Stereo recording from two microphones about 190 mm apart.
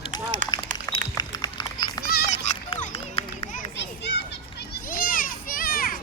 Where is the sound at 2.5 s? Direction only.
40° left (ahead or behind).